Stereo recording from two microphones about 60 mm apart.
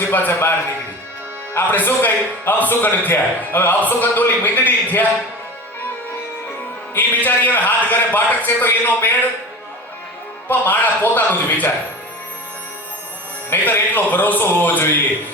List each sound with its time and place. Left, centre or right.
0.1 s a man's voice: left
1.5 s a man's voice: left
6.9 s a man's voice: left
10.5 s a man's voice: left
13.5 s a man's voice: left